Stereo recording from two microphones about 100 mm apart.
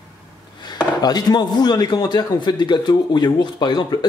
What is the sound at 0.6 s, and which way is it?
Speech, 45° left (ahead or behind).